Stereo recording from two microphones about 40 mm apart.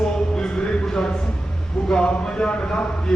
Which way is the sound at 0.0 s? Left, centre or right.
Left.